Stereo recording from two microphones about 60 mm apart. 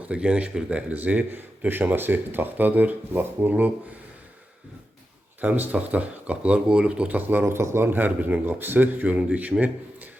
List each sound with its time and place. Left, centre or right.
0.0 s speech: centre; by 3.5 s right
5.4 s speech: right